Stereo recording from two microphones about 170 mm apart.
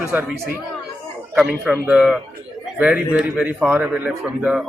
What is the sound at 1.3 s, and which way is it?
Speech, 5° right (ahead or behind).